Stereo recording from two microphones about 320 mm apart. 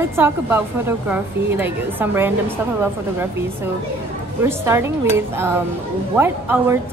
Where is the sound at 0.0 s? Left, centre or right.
Centre.